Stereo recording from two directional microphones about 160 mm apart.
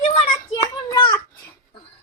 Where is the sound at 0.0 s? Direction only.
40° left (ahead or behind).